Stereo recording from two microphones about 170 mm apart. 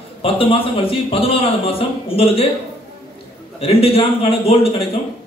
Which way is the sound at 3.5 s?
35° left (ahead or behind).